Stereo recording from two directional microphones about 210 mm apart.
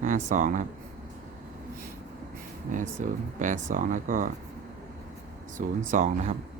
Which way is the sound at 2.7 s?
35° right (ahead or behind).